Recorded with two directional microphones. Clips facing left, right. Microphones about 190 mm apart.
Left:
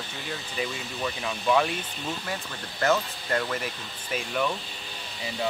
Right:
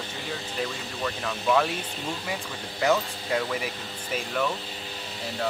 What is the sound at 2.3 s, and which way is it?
Speech, 10° right (ahead or behind).